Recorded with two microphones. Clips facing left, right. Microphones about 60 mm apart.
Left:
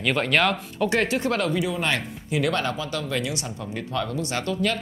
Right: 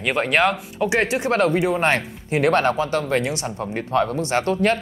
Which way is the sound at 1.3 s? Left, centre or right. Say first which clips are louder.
Right 6 dB; right.